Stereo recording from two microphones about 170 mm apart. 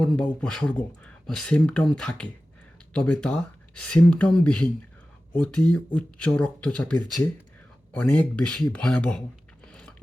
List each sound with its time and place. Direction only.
0.0 s speech: 5° left (ahead or behind)